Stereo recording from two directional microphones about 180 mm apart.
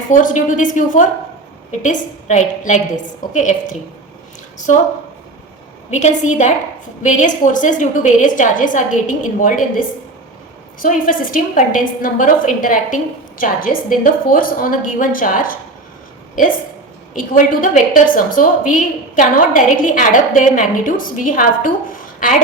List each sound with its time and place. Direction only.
0.1 s a woman's voice: 45° left (ahead or behind)
5.9 s a woman's voice: 40° left (ahead or behind)
10.8 s a woman's voice: 50° left (ahead or behind)
17.2 s a woman's voice: 50° left (ahead or behind)